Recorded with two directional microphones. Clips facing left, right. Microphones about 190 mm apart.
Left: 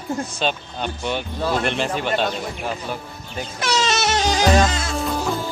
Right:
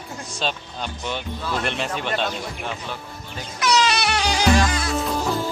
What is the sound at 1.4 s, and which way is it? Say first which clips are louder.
Speech: left 6 dB; 40° left (ahead or behind).